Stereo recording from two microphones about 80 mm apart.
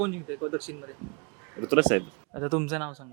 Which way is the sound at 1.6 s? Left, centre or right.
Centre.